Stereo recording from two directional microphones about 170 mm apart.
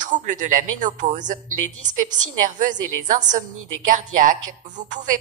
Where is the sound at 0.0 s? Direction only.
45° right (ahead or behind).